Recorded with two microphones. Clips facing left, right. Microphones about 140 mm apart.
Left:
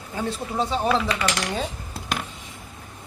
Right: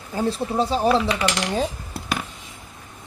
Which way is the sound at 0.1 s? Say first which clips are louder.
Right 5 dB; 35° right (ahead or behind).